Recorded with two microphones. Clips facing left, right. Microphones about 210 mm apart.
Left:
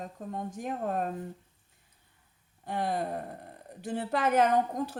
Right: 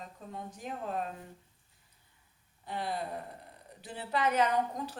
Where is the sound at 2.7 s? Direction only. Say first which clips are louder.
Left 5 dB; 50° left (ahead or behind).